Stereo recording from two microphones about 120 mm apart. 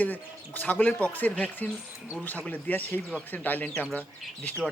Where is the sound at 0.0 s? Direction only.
15° left (ahead or behind).